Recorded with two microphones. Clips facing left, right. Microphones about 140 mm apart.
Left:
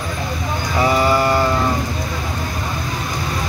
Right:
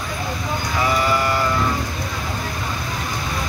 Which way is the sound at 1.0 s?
30° left (ahead or behind).